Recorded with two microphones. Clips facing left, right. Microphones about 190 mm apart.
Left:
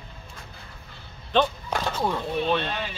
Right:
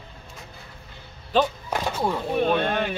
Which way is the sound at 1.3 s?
5° right (ahead or behind).